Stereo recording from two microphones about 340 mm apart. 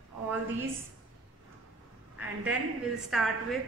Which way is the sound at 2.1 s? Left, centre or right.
Centre.